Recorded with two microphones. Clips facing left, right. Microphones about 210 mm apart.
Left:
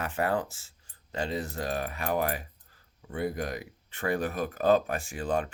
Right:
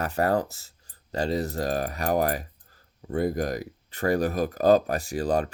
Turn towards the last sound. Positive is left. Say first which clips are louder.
# right 5 dB
turn(degrees=-40)  # may be behind; listen again after turning